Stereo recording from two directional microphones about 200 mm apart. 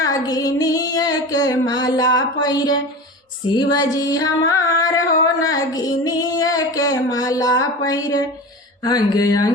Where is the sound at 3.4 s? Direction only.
20° left (ahead or behind).